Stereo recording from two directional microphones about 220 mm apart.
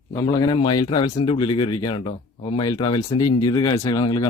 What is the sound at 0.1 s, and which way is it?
A man's voice, 15° left (ahead or behind).